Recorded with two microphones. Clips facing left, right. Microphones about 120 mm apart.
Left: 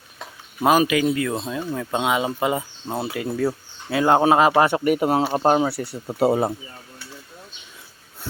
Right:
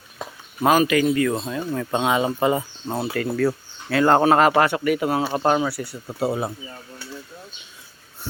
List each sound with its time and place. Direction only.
0.6 s speech: 10° left (ahead or behind)
4.8 s speech: 40° left (ahead or behind)
6.1 s speech: 55° left (ahead or behind)